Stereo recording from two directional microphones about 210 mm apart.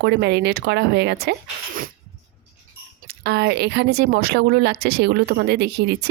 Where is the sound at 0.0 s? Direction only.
55° right (ahead or behind).